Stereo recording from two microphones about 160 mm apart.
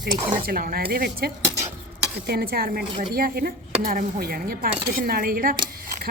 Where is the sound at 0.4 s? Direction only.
65° right (ahead or behind).